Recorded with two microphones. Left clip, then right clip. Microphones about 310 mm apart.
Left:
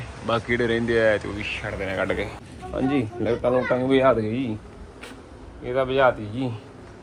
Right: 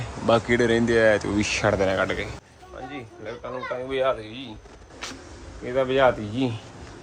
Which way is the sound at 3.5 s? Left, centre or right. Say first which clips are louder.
Left 3 dB; left.